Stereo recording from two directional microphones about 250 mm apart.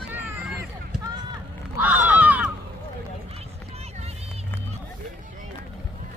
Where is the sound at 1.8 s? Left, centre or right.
Centre.